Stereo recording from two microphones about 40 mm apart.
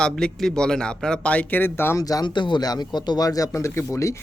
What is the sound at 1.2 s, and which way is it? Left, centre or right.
Speech, left.